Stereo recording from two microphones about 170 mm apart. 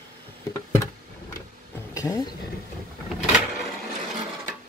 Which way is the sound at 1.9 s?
20° left (ahead or behind).